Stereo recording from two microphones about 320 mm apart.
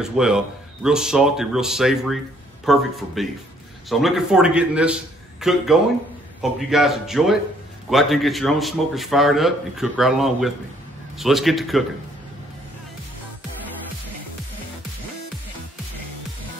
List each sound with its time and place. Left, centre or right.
0.0 s a man's voice: centre